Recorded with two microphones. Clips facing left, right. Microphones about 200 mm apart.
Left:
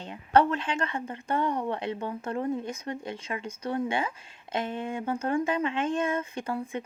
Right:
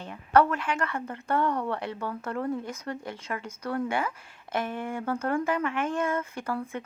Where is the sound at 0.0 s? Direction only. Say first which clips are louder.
Even; 20° left (ahead or behind).